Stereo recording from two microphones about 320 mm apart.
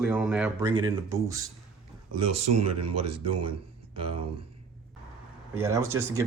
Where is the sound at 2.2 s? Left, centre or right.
Right.